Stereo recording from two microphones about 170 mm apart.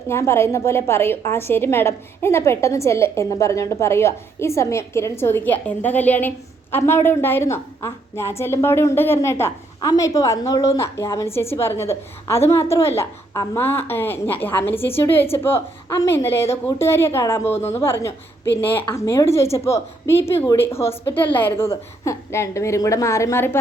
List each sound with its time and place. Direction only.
0.1 s a woman's voice: 15° left (ahead or behind)